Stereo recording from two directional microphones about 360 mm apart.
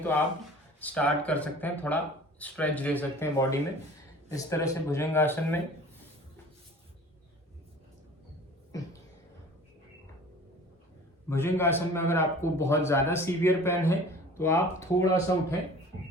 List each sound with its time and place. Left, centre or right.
0.8 s a man's voice: centre
11.3 s a man's voice: centre